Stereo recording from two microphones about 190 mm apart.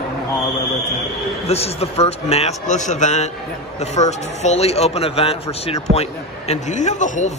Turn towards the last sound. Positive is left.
turn(degrees=40)  # may be behind; listen again after turning